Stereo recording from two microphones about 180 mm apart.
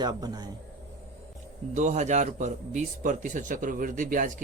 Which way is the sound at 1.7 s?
40° right (ahead or behind).